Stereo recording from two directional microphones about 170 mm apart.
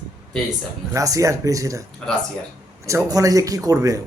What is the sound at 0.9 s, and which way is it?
Speech, 20° right (ahead or behind).